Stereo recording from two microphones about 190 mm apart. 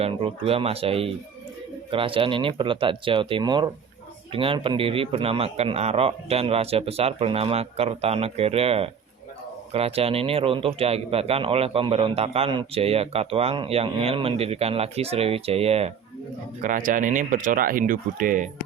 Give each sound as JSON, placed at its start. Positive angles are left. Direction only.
{"t": 0.0, "sound": "a man's voice", "side_deg": -30}
{"t": 16.6, "sound": "speech", "side_deg": -45}